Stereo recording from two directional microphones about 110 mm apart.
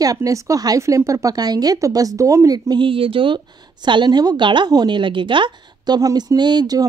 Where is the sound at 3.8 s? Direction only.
40° right (ahead or behind).